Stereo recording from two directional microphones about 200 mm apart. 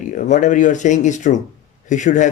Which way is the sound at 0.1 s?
40° left (ahead or behind).